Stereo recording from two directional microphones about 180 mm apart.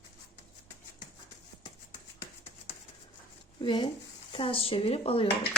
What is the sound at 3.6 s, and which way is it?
Speech, 25° left (ahead or behind).